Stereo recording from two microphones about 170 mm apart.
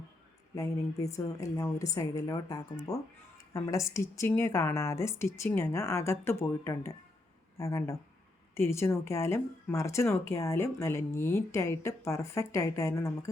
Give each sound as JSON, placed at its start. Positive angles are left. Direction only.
{"t": 0.5, "sound": "speech", "side_deg": 20}